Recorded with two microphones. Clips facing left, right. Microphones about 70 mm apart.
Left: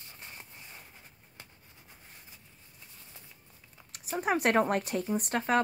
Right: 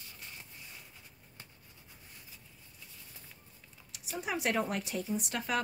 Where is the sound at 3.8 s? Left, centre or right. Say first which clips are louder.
Left 7 dB; left.